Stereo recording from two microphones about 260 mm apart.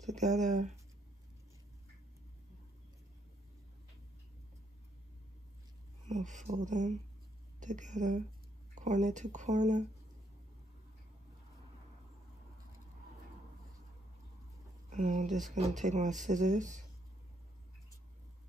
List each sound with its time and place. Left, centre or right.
0.0 s speech: right
6.0 s speech: right
14.9 s speech: right